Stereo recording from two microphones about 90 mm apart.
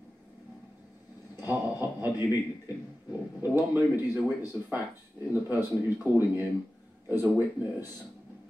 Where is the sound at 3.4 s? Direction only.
20° right (ahead or behind).